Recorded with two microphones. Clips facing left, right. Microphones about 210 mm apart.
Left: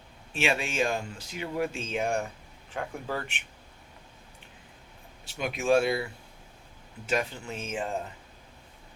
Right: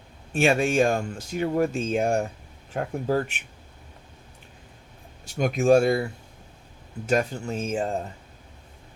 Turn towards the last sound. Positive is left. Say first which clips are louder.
# right 7 dB
turn(degrees=-40)  # may be behind; listen again after turning